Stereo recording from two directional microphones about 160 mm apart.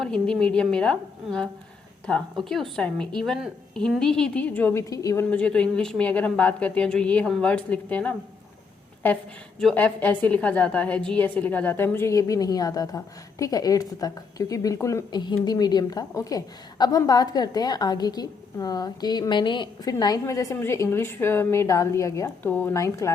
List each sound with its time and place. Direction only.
0.0 s a woman's voice: 5° left (ahead or behind)
9.6 s a woman's voice: 5° left (ahead or behind)